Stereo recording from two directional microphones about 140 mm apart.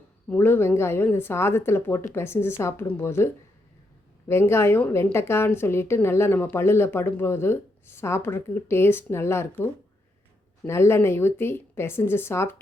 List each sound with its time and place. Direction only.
0.3 s a woman's voice: 15° left (ahead or behind)
4.3 s a woman's voice: 15° left (ahead or behind)
10.7 s a woman's voice: 20° left (ahead or behind)